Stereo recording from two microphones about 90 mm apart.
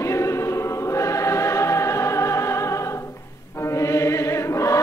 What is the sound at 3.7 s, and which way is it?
Chant, 35° left (ahead or behind).